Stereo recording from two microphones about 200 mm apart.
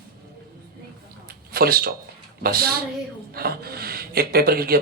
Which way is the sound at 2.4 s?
50° right (ahead or behind).